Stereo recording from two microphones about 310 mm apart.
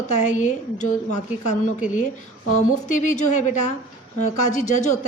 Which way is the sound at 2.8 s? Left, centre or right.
Left.